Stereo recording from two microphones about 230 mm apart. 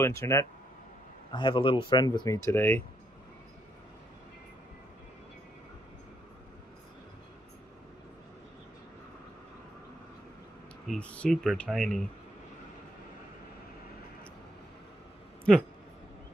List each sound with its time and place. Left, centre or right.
0.0 s speech: centre
10.9 s speech: centre